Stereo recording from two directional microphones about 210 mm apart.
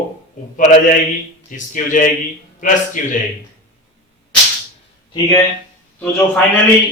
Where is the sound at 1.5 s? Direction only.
40° left (ahead or behind).